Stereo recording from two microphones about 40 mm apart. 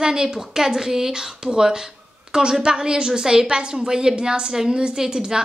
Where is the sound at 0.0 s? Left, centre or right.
Centre.